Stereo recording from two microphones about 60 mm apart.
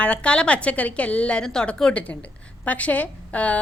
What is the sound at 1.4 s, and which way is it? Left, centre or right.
A woman's voice, centre.